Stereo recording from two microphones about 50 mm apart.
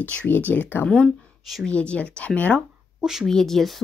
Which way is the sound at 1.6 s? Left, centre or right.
Left.